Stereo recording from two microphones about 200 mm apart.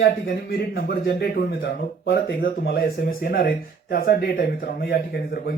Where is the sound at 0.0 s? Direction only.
50° left (ahead or behind).